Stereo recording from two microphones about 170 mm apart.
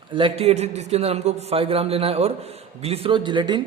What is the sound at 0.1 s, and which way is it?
A man's voice, 30° right (ahead or behind).